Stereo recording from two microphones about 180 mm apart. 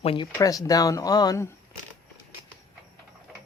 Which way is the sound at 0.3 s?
20° left (ahead or behind).